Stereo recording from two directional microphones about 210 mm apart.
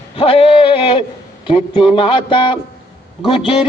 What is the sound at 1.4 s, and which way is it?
Music, 25° left (ahead or behind).